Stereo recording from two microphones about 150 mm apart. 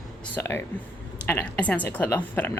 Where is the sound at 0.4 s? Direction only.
15° left (ahead or behind).